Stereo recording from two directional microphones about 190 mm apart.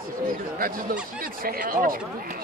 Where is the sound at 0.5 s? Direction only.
50° right (ahead or behind).